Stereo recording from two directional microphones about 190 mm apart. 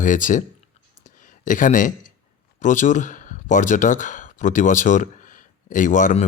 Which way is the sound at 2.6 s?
40° left (ahead or behind).